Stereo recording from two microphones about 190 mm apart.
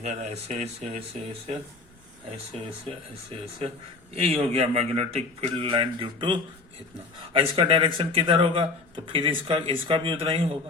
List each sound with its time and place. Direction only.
0.0 s a man's voice: 35° right (ahead or behind)
2.5 s a man's voice: 30° right (ahead or behind)